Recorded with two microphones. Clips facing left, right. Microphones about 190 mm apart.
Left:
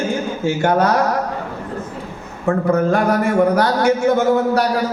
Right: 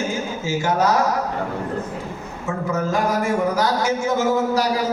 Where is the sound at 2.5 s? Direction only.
60° left (ahead or behind).